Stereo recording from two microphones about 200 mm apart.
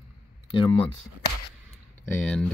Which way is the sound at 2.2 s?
5° left (ahead or behind).